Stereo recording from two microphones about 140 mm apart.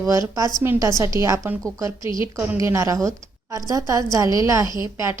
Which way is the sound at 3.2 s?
25° right (ahead or behind).